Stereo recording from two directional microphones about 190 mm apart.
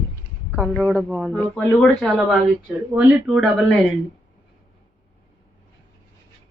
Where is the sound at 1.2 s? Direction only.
10° left (ahead or behind).